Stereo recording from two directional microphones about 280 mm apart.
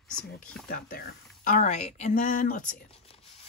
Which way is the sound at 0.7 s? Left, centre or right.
Left.